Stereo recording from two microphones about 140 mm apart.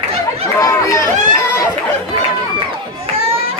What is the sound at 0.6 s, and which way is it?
Chatter, 25° left (ahead or behind).